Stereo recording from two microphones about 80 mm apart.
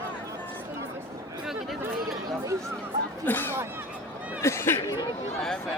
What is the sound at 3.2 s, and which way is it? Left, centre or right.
Speech, left.